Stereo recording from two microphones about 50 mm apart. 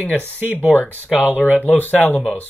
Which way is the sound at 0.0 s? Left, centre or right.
Left.